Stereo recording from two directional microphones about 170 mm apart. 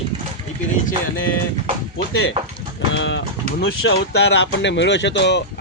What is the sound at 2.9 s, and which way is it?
Speech, 90° left.